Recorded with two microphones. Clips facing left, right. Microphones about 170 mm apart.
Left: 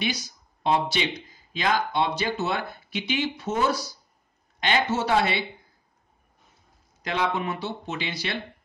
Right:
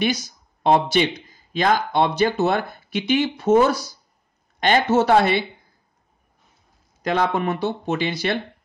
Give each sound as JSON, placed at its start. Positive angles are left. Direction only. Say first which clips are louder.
{"t": 0.0, "sound": "speech", "louder": "right 7 dB", "side_deg": -45}
{"t": 7.0, "sound": "speech", "louder": "right 6 dB", "side_deg": -50}